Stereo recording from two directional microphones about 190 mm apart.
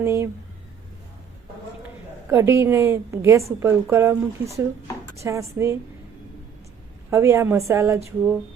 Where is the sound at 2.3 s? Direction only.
10° right (ahead or behind).